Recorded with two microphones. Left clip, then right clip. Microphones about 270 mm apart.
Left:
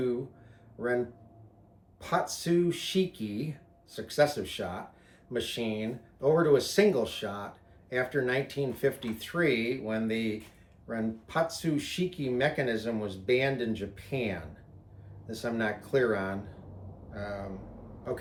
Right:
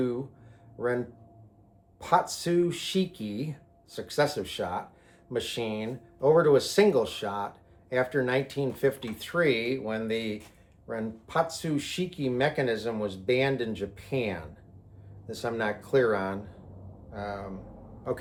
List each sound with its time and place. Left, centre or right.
2.0 s speech: centre